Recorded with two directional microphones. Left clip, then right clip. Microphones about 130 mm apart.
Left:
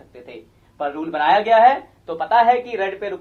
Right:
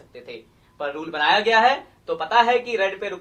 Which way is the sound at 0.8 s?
50° left (ahead or behind).